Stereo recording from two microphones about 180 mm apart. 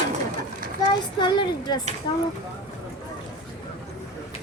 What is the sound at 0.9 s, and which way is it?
Speech, 25° left (ahead or behind).